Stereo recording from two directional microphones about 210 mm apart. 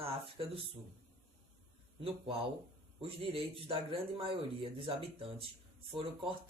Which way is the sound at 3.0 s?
25° right (ahead or behind).